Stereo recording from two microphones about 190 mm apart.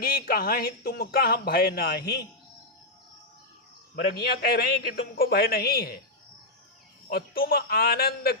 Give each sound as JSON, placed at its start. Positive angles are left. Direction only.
{"t": 0.0, "sound": "speech", "side_deg": 50}
{"t": 4.1, "sound": "speech", "side_deg": 55}
{"t": 7.1, "sound": "speech", "side_deg": 50}